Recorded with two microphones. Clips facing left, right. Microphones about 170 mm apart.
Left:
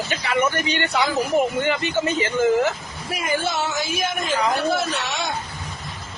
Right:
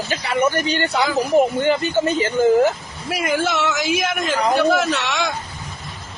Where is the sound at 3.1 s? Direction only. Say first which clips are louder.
Right 4 dB; 90° right.